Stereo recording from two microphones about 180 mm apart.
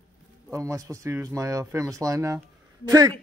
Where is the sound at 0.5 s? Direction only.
20° right (ahead or behind).